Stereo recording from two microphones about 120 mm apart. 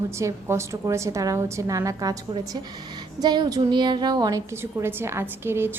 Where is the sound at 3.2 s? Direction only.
35° right (ahead or behind); by 5.7 s 20° right (ahead or behind).